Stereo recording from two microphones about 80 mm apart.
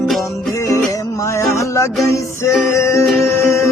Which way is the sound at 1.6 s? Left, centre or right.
Left.